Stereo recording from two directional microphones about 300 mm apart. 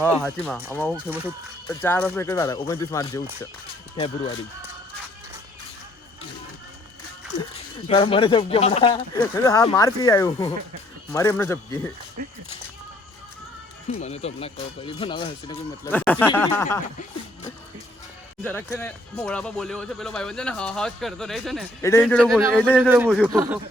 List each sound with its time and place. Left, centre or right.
0.0 s speech: centre
1.6 s speech: centre
7.9 s speech: centre
13.9 s speech: left
18.4 s speech: centre